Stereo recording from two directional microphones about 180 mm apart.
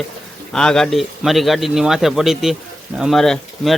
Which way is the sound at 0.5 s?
5° left (ahead or behind).